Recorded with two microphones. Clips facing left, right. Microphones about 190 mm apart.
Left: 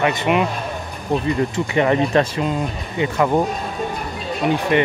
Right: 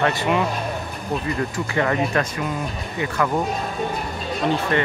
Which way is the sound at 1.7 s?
20° left (ahead or behind).